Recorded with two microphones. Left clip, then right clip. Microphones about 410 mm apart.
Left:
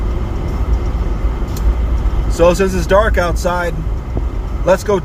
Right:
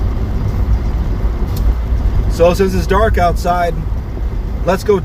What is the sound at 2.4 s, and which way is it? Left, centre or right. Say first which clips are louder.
Speech: even; centre.